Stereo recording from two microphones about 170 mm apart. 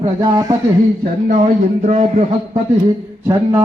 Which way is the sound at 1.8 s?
45° right (ahead or behind).